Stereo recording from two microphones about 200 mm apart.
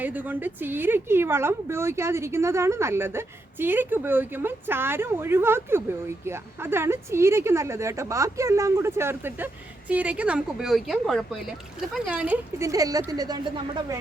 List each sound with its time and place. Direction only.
0.0 s a woman's voice: 10° right (ahead or behind)